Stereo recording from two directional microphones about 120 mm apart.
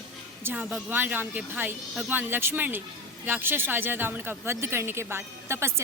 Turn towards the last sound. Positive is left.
turn(degrees=-20)  # may be behind; listen again after turning